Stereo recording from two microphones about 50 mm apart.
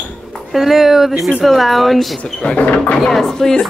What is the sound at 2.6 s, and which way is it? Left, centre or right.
Speech, left.